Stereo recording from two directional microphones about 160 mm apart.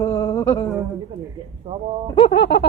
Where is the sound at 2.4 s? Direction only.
90° left.